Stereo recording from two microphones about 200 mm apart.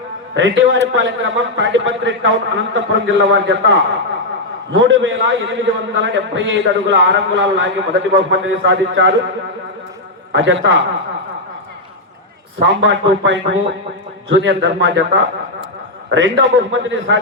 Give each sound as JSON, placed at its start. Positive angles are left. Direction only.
{"t": 0.3, "sound": "a man's voice", "side_deg": -70}
{"t": 10.3, "sound": "a man's voice", "side_deg": -70}
{"t": 12.5, "sound": "a man's voice", "side_deg": -70}